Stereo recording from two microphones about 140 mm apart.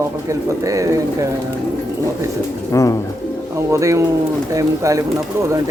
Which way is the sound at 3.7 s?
20° right (ahead or behind).